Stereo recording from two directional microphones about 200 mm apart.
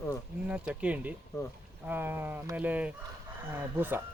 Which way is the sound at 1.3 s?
15° left (ahead or behind).